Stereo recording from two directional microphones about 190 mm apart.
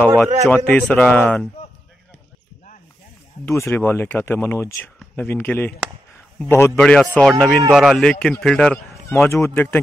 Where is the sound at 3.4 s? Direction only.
15° left (ahead or behind).